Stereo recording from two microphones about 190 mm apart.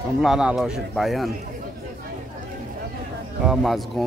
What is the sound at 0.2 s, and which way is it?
Speech, 5° right (ahead or behind).